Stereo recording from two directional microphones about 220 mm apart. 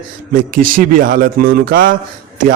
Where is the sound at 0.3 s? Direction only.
40° right (ahead or behind).